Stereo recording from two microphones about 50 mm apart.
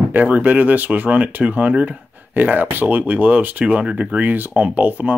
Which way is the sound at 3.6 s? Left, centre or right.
Right.